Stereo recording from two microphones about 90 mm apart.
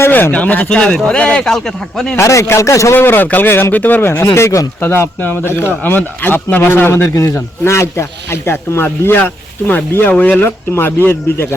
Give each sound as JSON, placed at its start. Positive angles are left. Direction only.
{"t": 0.0, "sound": "speech", "side_deg": 20}
{"t": 2.1, "sound": "a man's voice", "side_deg": 35}
{"t": 4.4, "sound": "a man's voice", "side_deg": 35}